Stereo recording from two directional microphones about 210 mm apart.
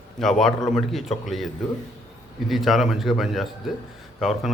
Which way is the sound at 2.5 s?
Centre (ahead or behind).